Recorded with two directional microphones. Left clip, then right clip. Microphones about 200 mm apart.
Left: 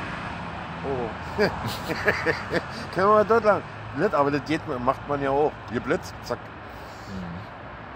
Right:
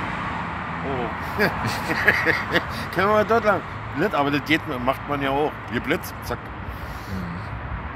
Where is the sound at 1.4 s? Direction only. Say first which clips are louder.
Right 2 dB; 35° left (ahead or behind).